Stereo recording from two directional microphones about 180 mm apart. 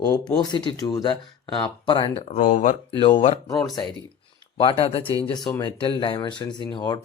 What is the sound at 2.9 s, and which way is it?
Speech, 30° left (ahead or behind).